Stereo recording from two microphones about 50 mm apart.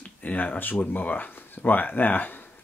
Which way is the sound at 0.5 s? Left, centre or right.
Left.